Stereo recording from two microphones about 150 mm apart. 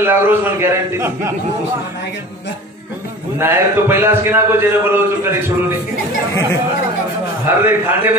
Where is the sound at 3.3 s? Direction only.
15° right (ahead or behind).